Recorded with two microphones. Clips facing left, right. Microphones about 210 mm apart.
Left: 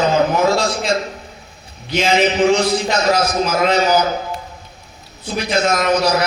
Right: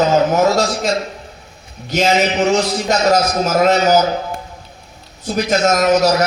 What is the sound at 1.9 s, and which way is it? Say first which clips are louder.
A man's voice: even; 45° right (ahead or behind).